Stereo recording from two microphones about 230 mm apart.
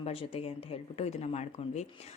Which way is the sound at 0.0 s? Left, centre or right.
Left.